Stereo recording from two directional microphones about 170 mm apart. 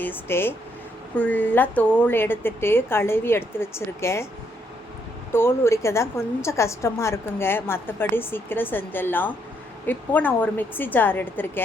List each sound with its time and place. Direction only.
0.0 s a woman's voice: 15° left (ahead or behind)
5.3 s a woman's voice: 15° left (ahead or behind)